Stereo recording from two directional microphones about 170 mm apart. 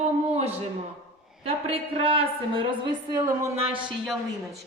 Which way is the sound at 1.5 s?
35° right (ahead or behind).